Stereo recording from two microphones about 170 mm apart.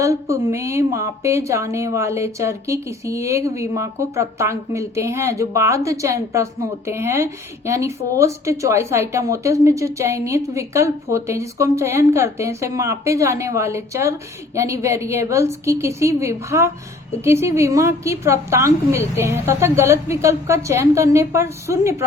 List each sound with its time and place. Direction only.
0.0 s a woman's voice: 20° right (ahead or behind)